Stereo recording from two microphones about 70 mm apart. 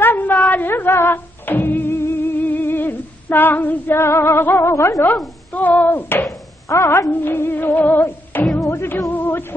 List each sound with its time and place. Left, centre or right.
0.0 s a sound: left
2.4 s female singing: left
5.0 s speech: left
6.7 s a woman's voice: left
7.1 s music: left
8.5 s music: left
9.1 s music: left